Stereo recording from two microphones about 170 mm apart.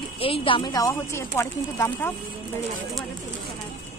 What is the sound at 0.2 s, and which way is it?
Speech, 35° left (ahead or behind).